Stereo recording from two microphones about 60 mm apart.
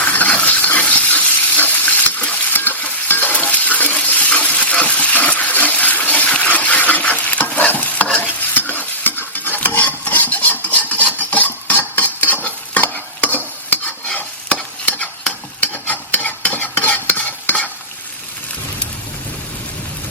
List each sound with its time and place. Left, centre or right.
0.0 s frying: left
3.1 s stir: left